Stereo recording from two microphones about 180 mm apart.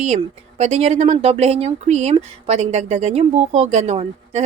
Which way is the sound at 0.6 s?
40° right (ahead or behind).